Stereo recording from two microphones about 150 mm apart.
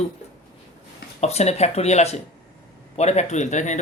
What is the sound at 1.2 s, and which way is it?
Speech, 45° left (ahead or behind).